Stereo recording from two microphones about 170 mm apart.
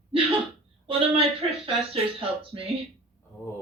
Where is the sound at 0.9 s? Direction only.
35° right (ahead or behind).